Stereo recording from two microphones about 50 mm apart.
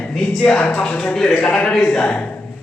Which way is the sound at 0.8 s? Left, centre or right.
Centre.